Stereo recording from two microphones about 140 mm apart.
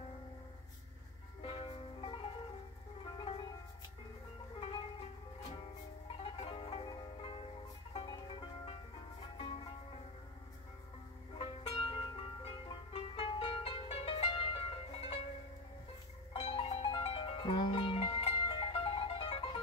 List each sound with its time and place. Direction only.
1.4 s music: 40° left (ahead or behind)
4.6 s music: 40° left (ahead or behind)
6.1 s music: 40° left (ahead or behind)
11.3 s music: 40° left (ahead or behind)
16.3 s music: 45° left (ahead or behind)